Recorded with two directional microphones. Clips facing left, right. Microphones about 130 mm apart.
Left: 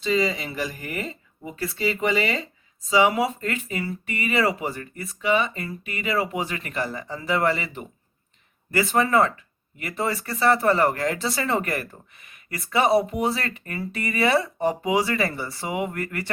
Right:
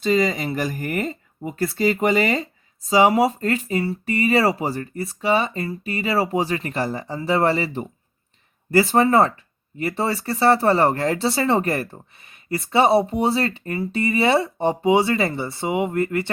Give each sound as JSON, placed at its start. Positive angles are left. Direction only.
{"t": 0.0, "sound": "speech", "side_deg": -45}